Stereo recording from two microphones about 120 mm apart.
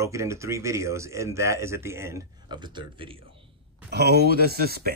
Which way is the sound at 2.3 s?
35° right (ahead or behind).